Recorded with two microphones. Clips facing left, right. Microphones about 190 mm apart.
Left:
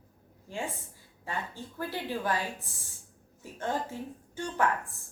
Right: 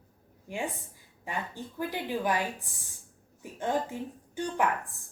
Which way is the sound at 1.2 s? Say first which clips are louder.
Right 1 dB; 15° right (ahead or behind).